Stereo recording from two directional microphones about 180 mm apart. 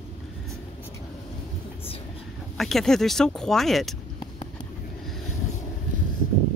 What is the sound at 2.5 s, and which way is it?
Speech, centre (ahead or behind).